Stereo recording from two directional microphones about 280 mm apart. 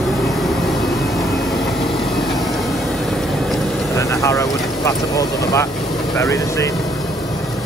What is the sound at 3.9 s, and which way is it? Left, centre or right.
Speech, centre.